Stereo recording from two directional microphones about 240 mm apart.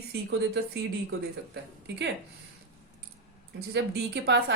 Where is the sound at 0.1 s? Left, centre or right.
Right.